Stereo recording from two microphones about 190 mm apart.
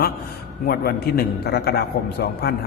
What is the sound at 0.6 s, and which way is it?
A man's voice, 50° left (ahead or behind).